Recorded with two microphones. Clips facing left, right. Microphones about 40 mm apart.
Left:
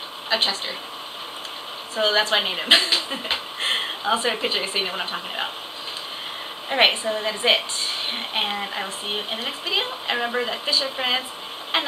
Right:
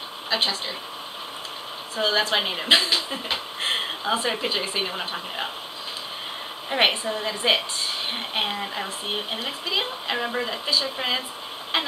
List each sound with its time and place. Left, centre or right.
0.3 s speech: centre
2.0 s speech: centre
6.7 s a woman's voice: centre